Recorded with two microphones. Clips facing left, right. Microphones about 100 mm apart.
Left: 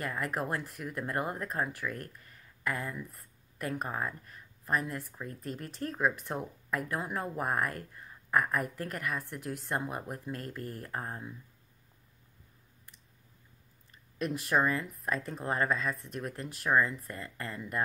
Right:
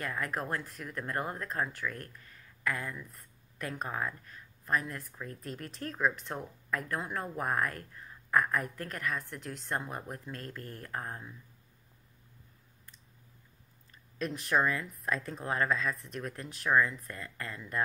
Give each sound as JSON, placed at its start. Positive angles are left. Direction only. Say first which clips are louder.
{"t": 0.0, "sound": "speech", "louder": "left 1 dB", "side_deg": 5}
{"t": 14.1, "sound": "speech", "louder": "left 1 dB", "side_deg": 5}